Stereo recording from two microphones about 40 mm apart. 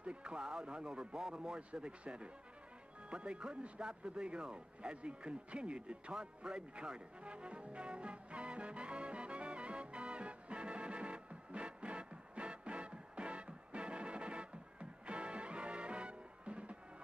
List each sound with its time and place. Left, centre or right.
0.0 s speech: right
3.1 s music: right